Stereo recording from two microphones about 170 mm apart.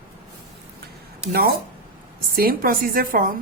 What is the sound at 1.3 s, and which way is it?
Speech, 65° right (ahead or behind).